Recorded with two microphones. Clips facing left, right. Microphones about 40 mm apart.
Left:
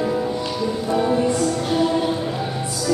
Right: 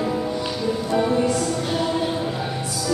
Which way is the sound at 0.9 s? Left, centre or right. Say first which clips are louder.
Left 1 dB; centre.